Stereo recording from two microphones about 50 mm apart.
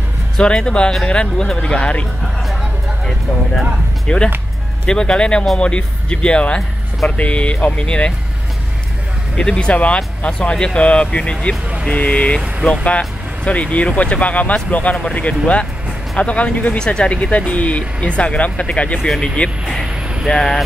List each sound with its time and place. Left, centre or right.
0.4 s speech: centre
4.1 s speech: left
9.4 s speech: centre
10.5 s speech: centre
19.0 s speech: centre